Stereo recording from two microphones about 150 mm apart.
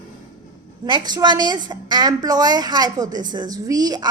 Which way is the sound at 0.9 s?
30° right (ahead or behind).